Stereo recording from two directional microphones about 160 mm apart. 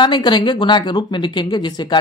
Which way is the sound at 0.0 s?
30° left (ahead or behind).